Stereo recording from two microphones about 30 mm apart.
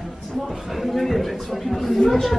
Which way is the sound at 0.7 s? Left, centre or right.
Centre.